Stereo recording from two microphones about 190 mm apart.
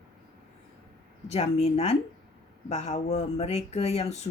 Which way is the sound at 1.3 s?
35° left (ahead or behind).